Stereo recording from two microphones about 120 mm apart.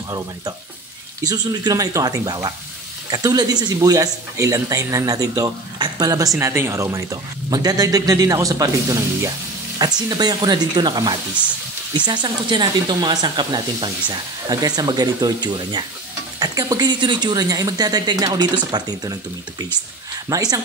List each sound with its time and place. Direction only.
1.2 s speech: 35° right (ahead or behind)
20.2 s speech: 30° right (ahead or behind)